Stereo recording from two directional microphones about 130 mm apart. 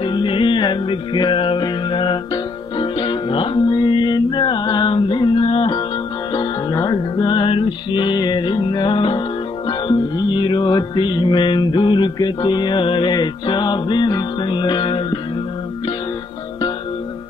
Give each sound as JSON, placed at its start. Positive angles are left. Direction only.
{"t": 0.0, "sound": "music", "side_deg": 40}